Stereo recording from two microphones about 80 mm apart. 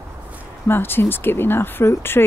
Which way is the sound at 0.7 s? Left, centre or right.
Left.